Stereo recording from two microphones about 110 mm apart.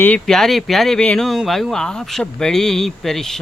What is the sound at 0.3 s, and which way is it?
Speech, 5° left (ahead or behind).